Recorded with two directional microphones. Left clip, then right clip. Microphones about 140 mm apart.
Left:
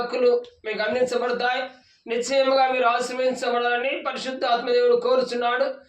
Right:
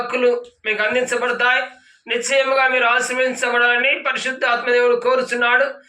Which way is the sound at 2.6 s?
50° left (ahead or behind).